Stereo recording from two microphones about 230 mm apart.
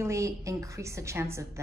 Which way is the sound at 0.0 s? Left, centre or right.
Centre.